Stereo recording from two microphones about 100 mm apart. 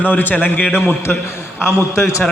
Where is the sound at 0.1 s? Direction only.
20° left (ahead or behind).